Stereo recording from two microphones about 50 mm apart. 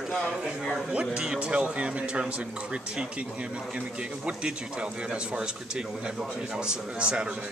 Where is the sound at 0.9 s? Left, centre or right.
Centre.